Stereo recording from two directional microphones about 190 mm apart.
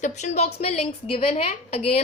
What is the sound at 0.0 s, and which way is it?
A woman's voice, 35° left (ahead or behind).